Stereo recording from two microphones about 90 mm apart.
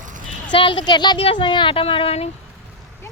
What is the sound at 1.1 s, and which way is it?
Speech, 80° left.